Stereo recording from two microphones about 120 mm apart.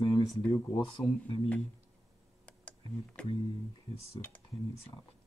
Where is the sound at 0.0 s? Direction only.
45° left (ahead or behind).